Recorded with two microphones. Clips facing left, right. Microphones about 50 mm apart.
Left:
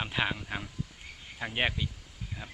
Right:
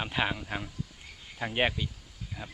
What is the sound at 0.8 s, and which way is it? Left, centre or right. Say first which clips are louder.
Cricket: left 1 dB; centre.